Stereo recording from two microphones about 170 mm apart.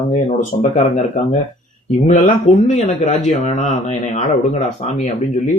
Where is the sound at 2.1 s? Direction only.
45° left (ahead or behind).